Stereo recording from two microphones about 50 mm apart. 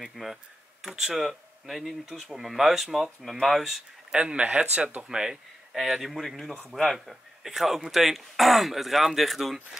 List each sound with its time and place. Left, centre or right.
0.1 s speech: centre
4.1 s speech: right
5.0 s speech: centre